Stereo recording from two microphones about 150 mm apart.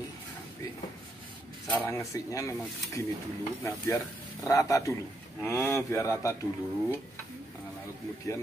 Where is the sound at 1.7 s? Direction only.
15° left (ahead or behind).